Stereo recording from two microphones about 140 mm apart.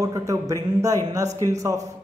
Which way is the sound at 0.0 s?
25° right (ahead or behind).